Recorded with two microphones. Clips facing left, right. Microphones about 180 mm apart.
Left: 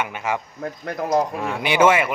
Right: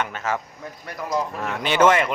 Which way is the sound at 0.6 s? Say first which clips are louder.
Left 6 dB; 55° left (ahead or behind).